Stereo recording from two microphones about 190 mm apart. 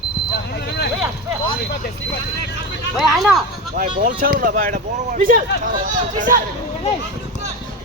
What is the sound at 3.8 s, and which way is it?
Speech, 50° right (ahead or behind).